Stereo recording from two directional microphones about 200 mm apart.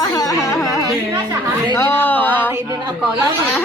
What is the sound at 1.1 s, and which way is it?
Speech, 20° right (ahead or behind).